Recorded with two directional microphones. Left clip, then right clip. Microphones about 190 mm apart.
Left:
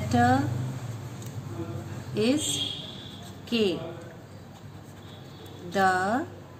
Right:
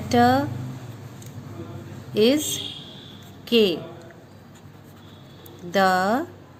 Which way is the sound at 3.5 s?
50° right (ahead or behind).